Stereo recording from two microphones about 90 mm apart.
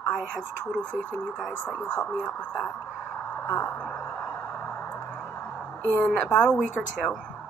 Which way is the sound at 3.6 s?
10° left (ahead or behind).